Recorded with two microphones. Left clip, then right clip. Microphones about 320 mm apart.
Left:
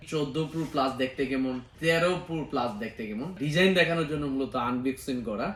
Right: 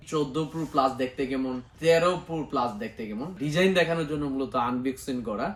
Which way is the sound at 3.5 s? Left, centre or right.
Centre.